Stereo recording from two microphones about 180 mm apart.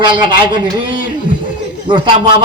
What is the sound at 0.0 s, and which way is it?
Speech, 25° right (ahead or behind).